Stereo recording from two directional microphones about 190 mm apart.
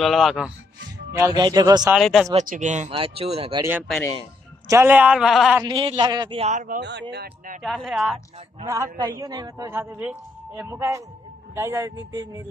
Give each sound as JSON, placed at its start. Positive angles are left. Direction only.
{"t": 0.0, "sound": "a woman's voice", "side_deg": 0}
{"t": 1.1, "sound": "a man's voice", "side_deg": -20}
{"t": 1.9, "sound": "a woman's voice", "side_deg": 0}
{"t": 2.3, "sound": "speech", "side_deg": -40}
{"t": 4.6, "sound": "a man's voice", "side_deg": -10}
{"t": 5.6, "sound": "a man's voice", "side_deg": -25}
{"t": 6.8, "sound": "speech", "side_deg": -65}
{"t": 7.6, "sound": "a woman's voice", "side_deg": 0}
{"t": 8.6, "sound": "a man's voice", "side_deg": -15}